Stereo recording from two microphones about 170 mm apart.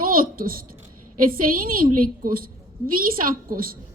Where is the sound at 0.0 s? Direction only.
55° right (ahead or behind).